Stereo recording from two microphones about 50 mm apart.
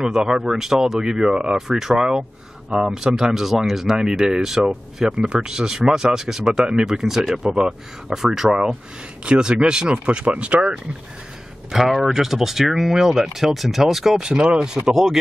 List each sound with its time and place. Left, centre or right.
0.0 s speech: centre
11.7 s speech: centre
14.2 s speech: centre